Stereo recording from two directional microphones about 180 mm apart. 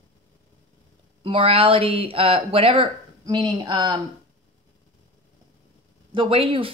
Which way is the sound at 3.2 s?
20° right (ahead or behind).